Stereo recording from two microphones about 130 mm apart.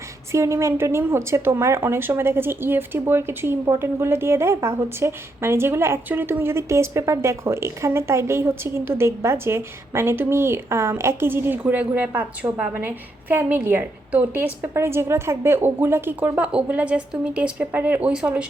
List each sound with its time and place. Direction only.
0.3 s a woman's voice: 20° right (ahead or behind)